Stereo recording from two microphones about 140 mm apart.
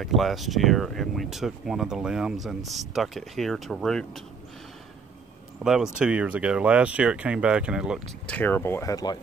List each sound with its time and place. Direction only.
0.0 s speech: centre (ahead or behind)
5.6 s speech: 5° right (ahead or behind)
8.3 s speech: 10° left (ahead or behind)